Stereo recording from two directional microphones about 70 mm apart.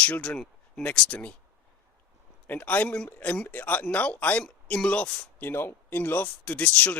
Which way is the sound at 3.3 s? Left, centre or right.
Centre.